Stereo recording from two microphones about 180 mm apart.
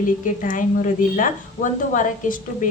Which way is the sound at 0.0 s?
45° left (ahead or behind).